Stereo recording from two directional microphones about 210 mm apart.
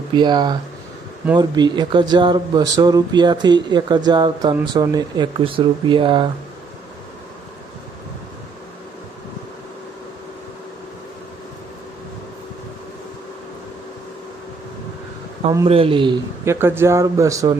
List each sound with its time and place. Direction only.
0.1 s speech: 20° right (ahead or behind)
15.4 s a man's voice: 25° right (ahead or behind)